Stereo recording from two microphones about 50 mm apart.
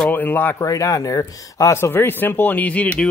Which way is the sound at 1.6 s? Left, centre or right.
Left.